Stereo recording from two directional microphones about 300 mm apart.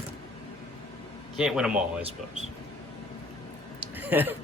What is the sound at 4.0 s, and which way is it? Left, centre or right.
Speech, centre.